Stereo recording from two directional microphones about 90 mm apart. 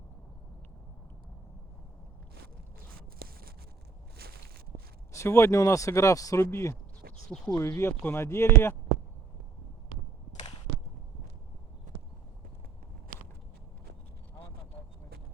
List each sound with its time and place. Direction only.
5.1 s speech: 30° left (ahead or behind)